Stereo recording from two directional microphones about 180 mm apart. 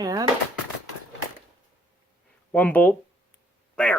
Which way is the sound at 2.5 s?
10° left (ahead or behind).